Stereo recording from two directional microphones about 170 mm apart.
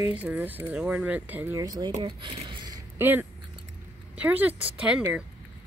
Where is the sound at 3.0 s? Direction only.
10° right (ahead or behind).